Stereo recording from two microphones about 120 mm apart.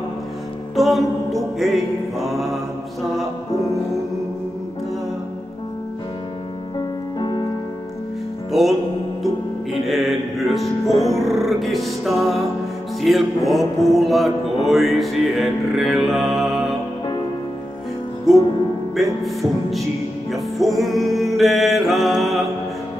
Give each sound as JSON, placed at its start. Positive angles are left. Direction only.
{"t": 0.7, "sound": "music", "side_deg": 0}
{"t": 7.2, "sound": "music", "side_deg": 40}
{"t": 8.5, "sound": "music", "side_deg": 0}
{"t": 18.3, "sound": "music", "side_deg": 0}